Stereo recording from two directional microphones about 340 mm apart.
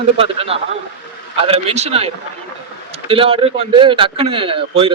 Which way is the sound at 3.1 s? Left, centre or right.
Centre.